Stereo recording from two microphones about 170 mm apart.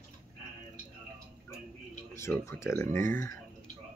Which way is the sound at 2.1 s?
15° left (ahead or behind).